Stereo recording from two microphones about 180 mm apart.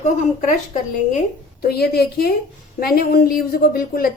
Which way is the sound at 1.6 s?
60° left (ahead or behind).